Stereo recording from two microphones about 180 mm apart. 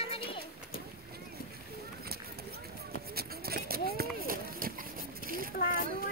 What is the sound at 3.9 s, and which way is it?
Run, 55° right (ahead or behind).